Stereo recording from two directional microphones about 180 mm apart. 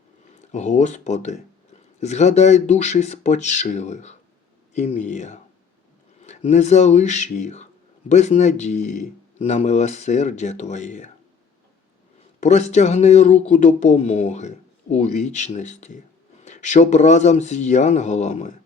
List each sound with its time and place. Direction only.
0.3 s speech: 40° left (ahead or behind)
12.4 s speech: 40° left (ahead or behind)